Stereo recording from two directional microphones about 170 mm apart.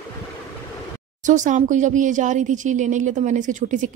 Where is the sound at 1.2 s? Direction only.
50° right (ahead or behind).